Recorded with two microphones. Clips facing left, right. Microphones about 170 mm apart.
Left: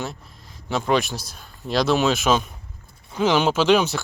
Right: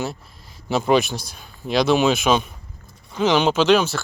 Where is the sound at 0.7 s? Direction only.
5° right (ahead or behind).